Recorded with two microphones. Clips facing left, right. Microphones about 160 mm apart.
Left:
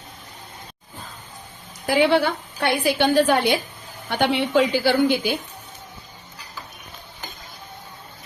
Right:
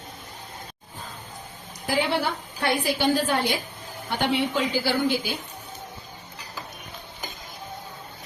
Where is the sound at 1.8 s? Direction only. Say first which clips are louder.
Left 7 dB; 70° left (ahead or behind).